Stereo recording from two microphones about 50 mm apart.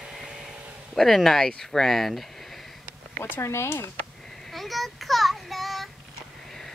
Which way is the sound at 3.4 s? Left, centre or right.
Left.